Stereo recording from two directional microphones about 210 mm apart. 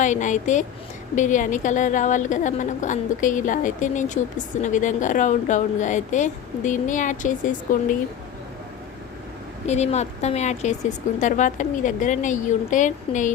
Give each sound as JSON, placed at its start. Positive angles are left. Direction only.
{"t": 0.0, "sound": "a woman's voice", "side_deg": 35}
{"t": 9.6, "sound": "a woman's voice", "side_deg": 30}